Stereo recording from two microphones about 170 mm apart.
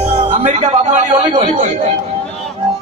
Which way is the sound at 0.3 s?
45° right (ahead or behind).